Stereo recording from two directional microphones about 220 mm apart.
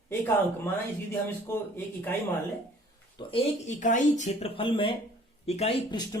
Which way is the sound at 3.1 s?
30° left (ahead or behind).